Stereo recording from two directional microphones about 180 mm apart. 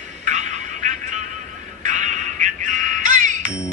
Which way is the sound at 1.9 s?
45° right (ahead or behind).